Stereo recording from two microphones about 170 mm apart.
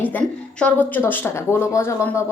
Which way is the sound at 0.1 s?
10° left (ahead or behind).